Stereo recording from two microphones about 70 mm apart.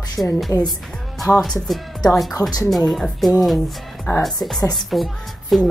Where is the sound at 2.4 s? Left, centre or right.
Left.